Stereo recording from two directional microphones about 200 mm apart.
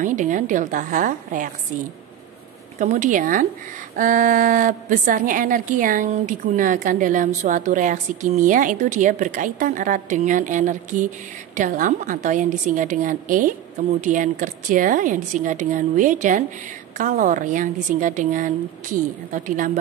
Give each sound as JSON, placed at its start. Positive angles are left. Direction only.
{"t": 0.0, "sound": "a woman's voice", "side_deg": -40}
{"t": 2.8, "sound": "a woman's voice", "side_deg": -40}